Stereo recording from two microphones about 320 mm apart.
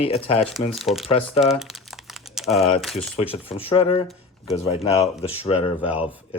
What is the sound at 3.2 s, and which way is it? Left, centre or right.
Speech, centre.